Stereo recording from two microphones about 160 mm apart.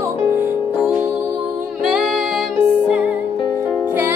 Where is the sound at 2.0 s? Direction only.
5° right (ahead or behind).